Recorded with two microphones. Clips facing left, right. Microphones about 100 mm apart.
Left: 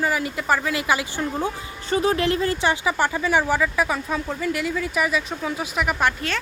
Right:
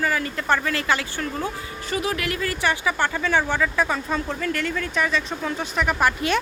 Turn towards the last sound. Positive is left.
turn(degrees=-5)  # may be behind; listen again after turning